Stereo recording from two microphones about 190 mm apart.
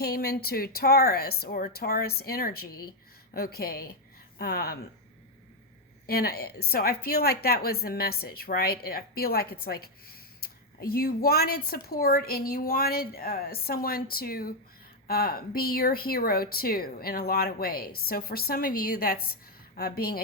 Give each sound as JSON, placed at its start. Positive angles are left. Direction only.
{"t": 0.0, "sound": "a woman's voice", "side_deg": 55}
{"t": 6.1, "sound": "a woman's voice", "side_deg": 55}